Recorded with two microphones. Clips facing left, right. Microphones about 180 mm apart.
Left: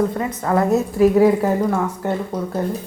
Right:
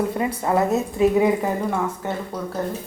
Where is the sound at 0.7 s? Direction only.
Centre (ahead or behind).